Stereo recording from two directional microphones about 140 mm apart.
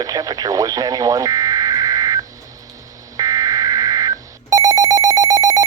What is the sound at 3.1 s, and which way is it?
Telephone, 25° right (ahead or behind).